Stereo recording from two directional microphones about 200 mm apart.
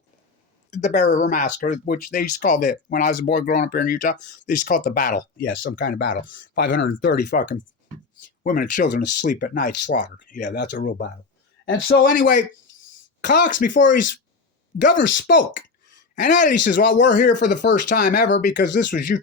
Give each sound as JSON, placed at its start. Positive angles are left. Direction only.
{"t": 0.7, "sound": "a man's voice", "side_deg": 35}
{"t": 8.4, "sound": "a man's voice", "side_deg": 40}